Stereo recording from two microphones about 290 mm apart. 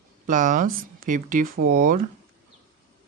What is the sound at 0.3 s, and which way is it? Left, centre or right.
Speech, right.